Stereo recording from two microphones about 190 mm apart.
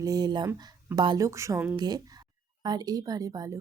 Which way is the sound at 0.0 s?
20° right (ahead or behind).